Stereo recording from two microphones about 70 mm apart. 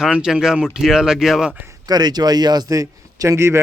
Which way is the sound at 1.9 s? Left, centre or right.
Right.